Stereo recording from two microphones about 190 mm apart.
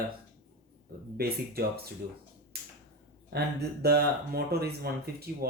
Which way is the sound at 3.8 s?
55° right (ahead or behind).